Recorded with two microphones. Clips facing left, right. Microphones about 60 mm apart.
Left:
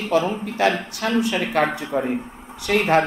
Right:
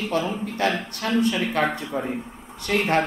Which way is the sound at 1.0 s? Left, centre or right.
Left.